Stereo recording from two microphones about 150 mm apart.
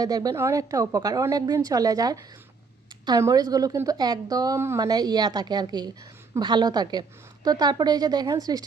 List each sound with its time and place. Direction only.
0.0 s a woman's voice: 25° right (ahead or behind)